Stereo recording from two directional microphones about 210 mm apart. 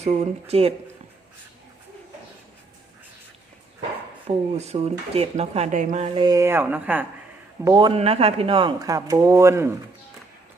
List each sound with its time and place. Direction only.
0.0 s speech: 30° right (ahead or behind)
4.5 s speech: 30° right (ahead or behind)
6.1 s speech: 20° right (ahead or behind)
7.6 s speech: 20° right (ahead or behind)